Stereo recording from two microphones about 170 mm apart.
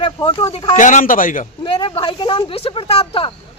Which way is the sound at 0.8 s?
45° left (ahead or behind).